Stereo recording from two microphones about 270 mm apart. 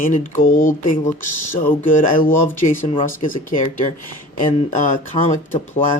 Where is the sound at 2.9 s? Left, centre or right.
Left.